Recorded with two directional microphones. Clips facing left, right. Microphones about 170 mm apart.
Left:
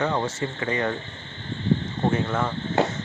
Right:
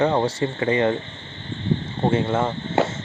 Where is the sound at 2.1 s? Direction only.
25° right (ahead or behind).